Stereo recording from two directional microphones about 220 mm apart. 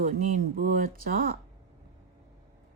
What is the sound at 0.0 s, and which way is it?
Speech, 35° right (ahead or behind).